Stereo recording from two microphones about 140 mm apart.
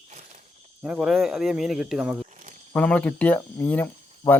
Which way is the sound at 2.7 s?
10° left (ahead or behind).